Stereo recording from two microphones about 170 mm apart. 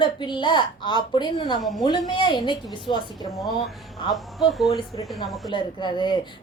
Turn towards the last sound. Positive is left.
turn(degrees=25)  # may be behind; listen again after turning